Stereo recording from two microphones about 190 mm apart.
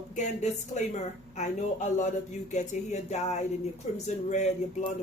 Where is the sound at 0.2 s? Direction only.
40° left (ahead or behind).